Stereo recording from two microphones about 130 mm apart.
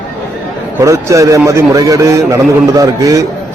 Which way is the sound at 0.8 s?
25° right (ahead or behind).